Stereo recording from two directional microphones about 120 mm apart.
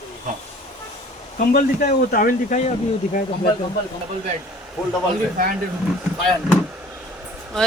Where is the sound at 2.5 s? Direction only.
90° left.